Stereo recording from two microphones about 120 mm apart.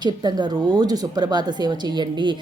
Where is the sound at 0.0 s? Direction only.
35° right (ahead or behind).